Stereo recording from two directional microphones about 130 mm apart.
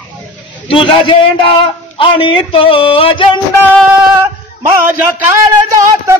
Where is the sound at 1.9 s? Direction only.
45° left (ahead or behind).